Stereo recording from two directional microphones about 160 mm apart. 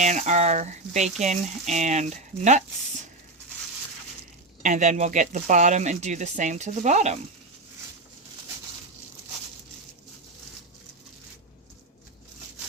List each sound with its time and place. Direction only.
0.0 s speech: 50° right (ahead or behind)
4.6 s speech: 50° right (ahead or behind)